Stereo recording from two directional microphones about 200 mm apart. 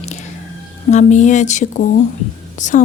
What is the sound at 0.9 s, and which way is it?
A woman's voice, 35° left (ahead or behind).